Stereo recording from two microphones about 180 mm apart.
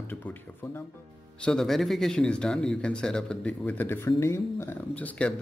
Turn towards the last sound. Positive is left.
turn(degrees=5)  # may be behind; listen again after turning